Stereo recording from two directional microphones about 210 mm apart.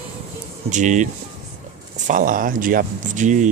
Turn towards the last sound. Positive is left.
turn(degrees=-35)  # may be behind; listen again after turning